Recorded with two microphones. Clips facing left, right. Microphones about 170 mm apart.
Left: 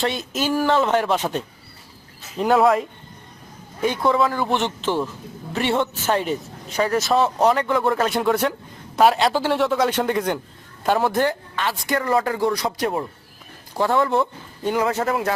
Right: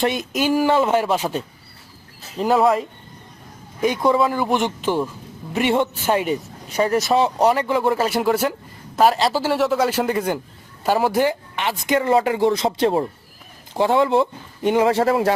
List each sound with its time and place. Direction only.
0.0 s a man's voice: 15° right (ahead or behind); by 2.8 s centre (ahead or behind)
3.8 s a man's voice: 15° right (ahead or behind)
13.7 s speech: 15° right (ahead or behind)